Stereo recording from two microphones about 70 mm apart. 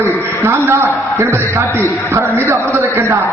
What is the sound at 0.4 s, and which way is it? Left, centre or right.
Speech, right.